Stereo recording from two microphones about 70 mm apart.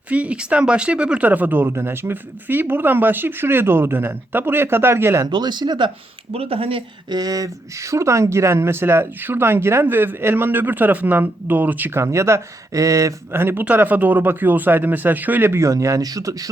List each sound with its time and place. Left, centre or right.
0.1 s speech: centre; by 5.2 s right
5.3 s speech: right
7.1 s speech: right
11.9 s speech: right
13.3 s a man's voice: right
15.6 s speech: right